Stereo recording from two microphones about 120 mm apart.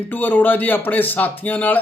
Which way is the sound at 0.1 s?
15° left (ahead or behind).